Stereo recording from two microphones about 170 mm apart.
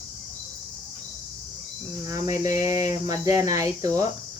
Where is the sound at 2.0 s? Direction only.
20° right (ahead or behind).